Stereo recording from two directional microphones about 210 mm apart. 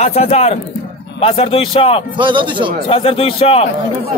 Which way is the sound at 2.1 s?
20° right (ahead or behind).